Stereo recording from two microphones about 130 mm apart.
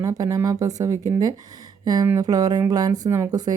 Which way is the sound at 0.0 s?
25° right (ahead or behind).